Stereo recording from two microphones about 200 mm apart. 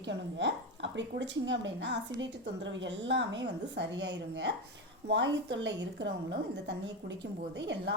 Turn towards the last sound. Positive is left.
turn(degrees=-60)  # may be behind; listen again after turning